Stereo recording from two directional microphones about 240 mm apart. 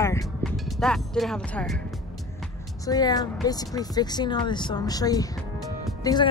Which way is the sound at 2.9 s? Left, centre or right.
Centre.